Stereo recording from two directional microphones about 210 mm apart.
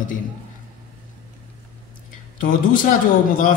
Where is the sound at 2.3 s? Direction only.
40° left (ahead or behind).